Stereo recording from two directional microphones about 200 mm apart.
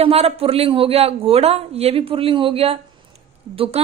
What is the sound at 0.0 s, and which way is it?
A woman's voice, 30° right (ahead or behind).